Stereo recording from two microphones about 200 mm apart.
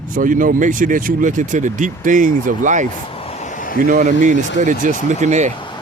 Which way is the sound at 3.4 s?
40° left (ahead or behind).